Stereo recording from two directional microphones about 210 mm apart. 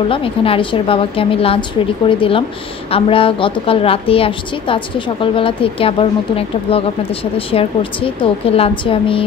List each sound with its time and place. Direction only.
0.1 s a woman's voice: 25° left (ahead or behind)